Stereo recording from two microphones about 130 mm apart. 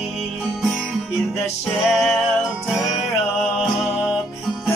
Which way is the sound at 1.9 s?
5° left (ahead or behind).